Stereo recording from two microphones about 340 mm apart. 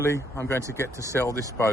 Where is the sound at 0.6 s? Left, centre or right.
Centre.